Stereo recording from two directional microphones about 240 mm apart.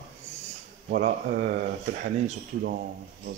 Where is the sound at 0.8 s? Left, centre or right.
Right.